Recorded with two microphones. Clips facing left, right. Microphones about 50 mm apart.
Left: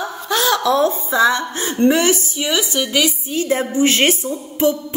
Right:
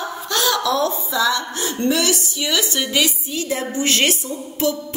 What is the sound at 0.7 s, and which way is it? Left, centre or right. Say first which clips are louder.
A woman's voice: left 4 dB; left.